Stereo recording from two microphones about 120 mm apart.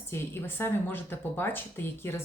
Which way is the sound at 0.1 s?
20° left (ahead or behind).